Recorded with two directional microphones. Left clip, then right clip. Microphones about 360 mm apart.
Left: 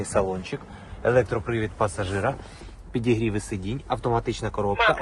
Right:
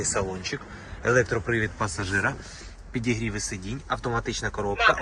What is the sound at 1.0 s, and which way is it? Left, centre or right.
Speech, centre.